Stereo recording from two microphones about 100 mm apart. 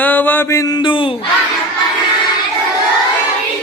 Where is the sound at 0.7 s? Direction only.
55° left (ahead or behind).